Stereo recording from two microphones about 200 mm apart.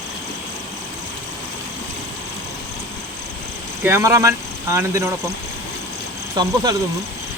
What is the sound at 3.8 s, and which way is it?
Speech, 15° right (ahead or behind).